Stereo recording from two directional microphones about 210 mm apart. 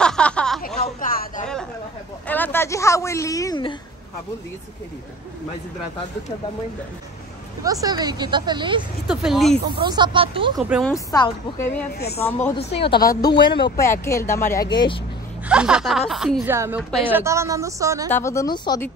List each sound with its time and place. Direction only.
0.0 s a sound: 5° left (ahead or behind)
0.8 s a sound: 40° left (ahead or behind)
2.2 s speech: 10° left (ahead or behind)
7.6 s speech: 15° right (ahead or behind)
9.0 s speech: centre (ahead or behind)
9.8 s speech: 20° right (ahead or behind)
10.9 s speech: 15° left (ahead or behind)
12.5 s a woman's voice: 55° left (ahead or behind)
12.8 s a woman's voice: 20° left (ahead or behind)
15.4 s speech: 5° right (ahead or behind)
18.1 s speech: 15° left (ahead or behind)